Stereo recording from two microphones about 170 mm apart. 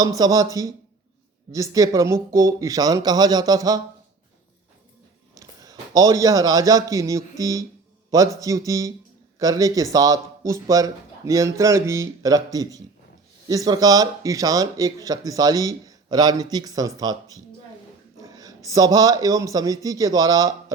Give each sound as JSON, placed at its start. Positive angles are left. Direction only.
{"t": 0.0, "sound": "speech", "side_deg": -20}
{"t": 5.3, "sound": "a man's voice", "side_deg": -20}